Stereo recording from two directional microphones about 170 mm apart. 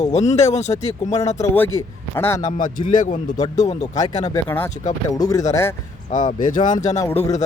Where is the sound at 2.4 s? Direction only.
50° left (ahead or behind).